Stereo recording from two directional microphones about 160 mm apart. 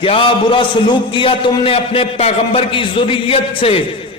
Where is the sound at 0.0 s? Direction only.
35° left (ahead or behind).